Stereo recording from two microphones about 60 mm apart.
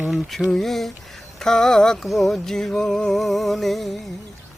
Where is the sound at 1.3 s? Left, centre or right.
Centre.